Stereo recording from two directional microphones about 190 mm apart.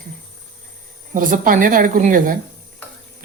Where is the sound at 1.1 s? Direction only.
45° right (ahead or behind).